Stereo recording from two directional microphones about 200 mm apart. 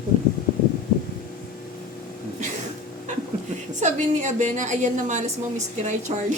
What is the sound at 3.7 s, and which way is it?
A woman's voice, 35° right (ahead or behind).